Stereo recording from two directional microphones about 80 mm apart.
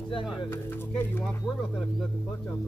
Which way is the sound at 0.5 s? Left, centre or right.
Left.